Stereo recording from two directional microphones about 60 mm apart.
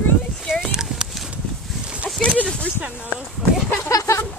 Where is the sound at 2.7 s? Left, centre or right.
Right.